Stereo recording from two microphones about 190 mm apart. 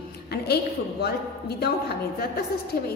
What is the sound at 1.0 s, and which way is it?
Speech, 60° left (ahead or behind).